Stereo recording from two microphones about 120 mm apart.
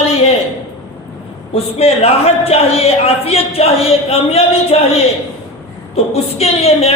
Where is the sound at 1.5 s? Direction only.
60° left (ahead or behind).